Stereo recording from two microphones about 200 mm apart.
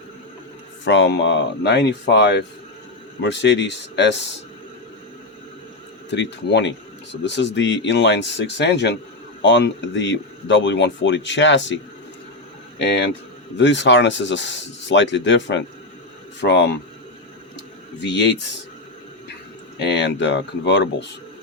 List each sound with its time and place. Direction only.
0.9 s speech: 60° left (ahead or behind)
6.1 s speech: 60° left (ahead or behind)
13.6 s speech: 60° left (ahead or behind)
18.0 s speech: 60° left (ahead or behind)
19.8 s speech: 60° left (ahead or behind)